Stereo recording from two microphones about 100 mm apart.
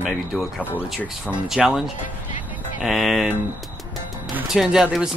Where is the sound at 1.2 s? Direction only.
10° right (ahead or behind).